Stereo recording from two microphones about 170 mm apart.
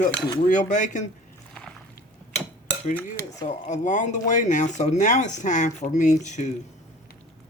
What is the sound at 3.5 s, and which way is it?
Speech, 45° left (ahead or behind).